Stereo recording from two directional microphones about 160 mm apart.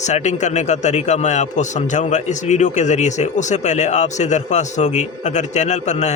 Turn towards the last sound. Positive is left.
turn(degrees=45)  # may be behind; listen again after turning